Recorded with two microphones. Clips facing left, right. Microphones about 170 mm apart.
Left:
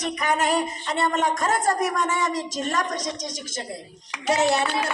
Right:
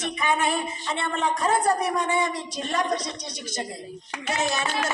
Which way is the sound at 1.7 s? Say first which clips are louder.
Even; 90° left.